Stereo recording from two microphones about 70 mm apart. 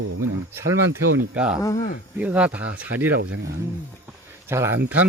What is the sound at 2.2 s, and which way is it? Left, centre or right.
Speech, right.